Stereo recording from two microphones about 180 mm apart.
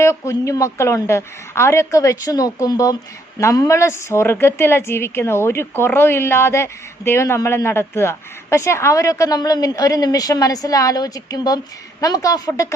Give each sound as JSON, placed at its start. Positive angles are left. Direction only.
{"t": 0.0, "sound": "a woman's voice", "side_deg": 15}